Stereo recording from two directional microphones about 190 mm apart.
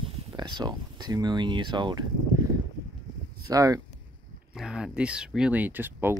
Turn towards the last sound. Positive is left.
turn(degrees=-10)  # may be behind; listen again after turning